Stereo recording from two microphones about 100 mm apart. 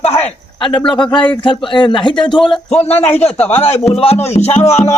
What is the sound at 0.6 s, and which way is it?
Speech, 50° left (ahead or behind).